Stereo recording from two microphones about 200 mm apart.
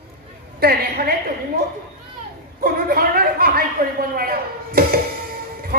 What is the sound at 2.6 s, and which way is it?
A woman's voice, 45° right (ahead or behind).